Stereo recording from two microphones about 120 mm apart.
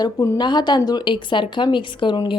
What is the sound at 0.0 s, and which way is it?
Speech, 35° left (ahead or behind).